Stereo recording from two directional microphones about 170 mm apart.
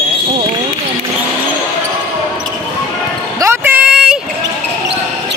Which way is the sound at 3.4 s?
10° right (ahead or behind).